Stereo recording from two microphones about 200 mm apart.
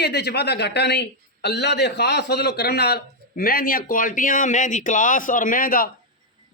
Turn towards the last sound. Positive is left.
turn(degrees=45)  # may be behind; listen again after turning